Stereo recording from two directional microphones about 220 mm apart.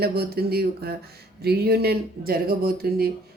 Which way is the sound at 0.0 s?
45° right (ahead or behind).